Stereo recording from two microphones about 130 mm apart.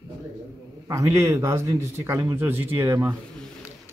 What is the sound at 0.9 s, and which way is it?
A man's voice, 20° right (ahead or behind).